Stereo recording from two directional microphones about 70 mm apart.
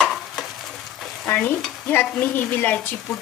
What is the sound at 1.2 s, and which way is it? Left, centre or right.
Stir, left.